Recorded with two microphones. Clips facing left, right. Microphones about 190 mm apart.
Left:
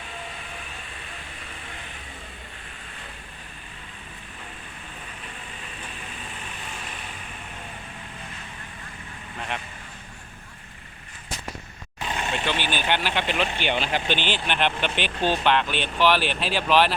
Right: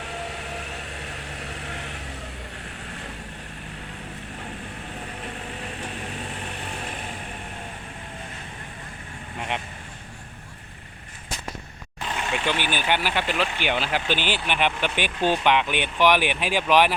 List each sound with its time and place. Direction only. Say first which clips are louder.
0.0 s a sound: right 5 dB; 75° right (ahead or behind)
5.2 s vehicle: right 7 dB; 70° right (ahead or behind)
12.3 s speech: right 2 dB; 10° right (ahead or behind)